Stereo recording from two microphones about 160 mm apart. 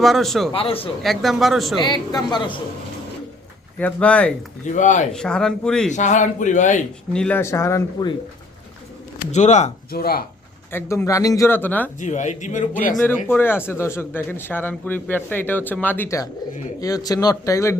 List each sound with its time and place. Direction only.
0.0 s a man's voice: centre (ahead or behind)
0.5 s speech: 35° left (ahead or behind)
1.0 s a man's voice: centre (ahead or behind)
1.8 s speech: 25° left (ahead or behind)
3.8 s speech: 10° left (ahead or behind)
4.7 s a man's voice: 50° left (ahead or behind)
5.1 s a man's voice: 5° left (ahead or behind)
5.9 s a man's voice: 50° left (ahead or behind)
7.1 s speech: 5° left (ahead or behind); by 8.1 s 20° left (ahead or behind)
9.3 s a man's voice: 45° left (ahead or behind)
9.9 s speech: 70° left (ahead or behind)
10.7 s speech: 15° left (ahead or behind)
11.9 s a man's voice: 50° left (ahead or behind)
13.0 s speech: 15° left (ahead or behind)